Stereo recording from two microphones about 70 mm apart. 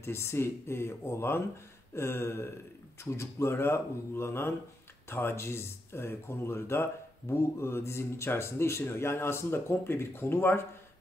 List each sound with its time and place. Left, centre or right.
0.0 s speech: left